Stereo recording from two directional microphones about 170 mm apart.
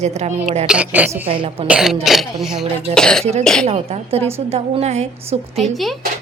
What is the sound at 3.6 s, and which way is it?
A woman's voice, 35° right (ahead or behind).